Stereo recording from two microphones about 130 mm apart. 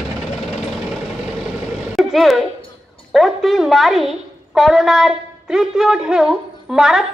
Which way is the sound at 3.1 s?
Centre (ahead or behind).